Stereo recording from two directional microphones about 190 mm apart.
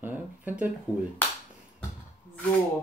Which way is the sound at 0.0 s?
10° right (ahead or behind).